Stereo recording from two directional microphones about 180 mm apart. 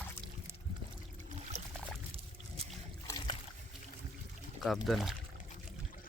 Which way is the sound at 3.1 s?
25° left (ahead or behind).